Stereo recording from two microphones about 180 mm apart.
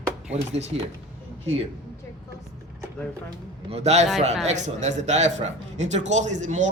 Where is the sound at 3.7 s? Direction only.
40° right (ahead or behind).